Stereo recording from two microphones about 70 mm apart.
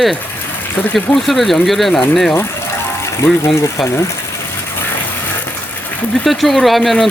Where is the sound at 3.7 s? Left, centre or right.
Left.